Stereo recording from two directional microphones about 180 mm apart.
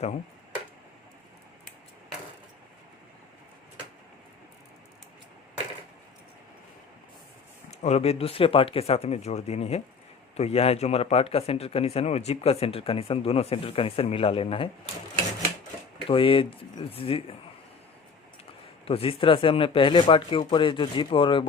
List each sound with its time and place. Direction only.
7.7 s a man's voice: 35° left (ahead or behind)
16.0 s speech: 30° left (ahead or behind)
18.9 s speech: 30° left (ahead or behind)